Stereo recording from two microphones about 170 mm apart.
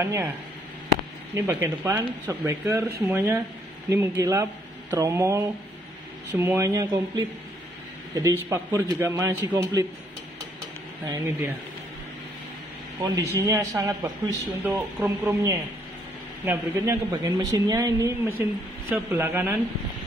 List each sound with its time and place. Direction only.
0.0 s speech: 15° right (ahead or behind)
1.3 s speech: 15° right (ahead or behind)
11.1 s speech: 15° right (ahead or behind)
13.0 s speech: 20° right (ahead or behind)
14.6 s speech: 10° right (ahead or behind)